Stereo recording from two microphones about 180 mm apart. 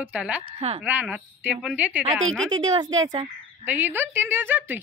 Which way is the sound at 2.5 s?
25° right (ahead or behind).